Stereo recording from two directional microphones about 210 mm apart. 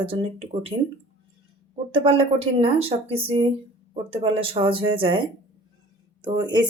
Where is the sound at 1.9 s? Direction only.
25° right (ahead or behind).